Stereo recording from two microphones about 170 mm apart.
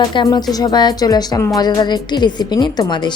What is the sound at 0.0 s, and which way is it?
A woman's voice, 25° left (ahead or behind).